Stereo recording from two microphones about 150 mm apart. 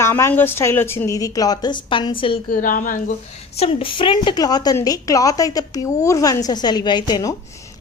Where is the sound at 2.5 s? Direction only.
65° left (ahead or behind).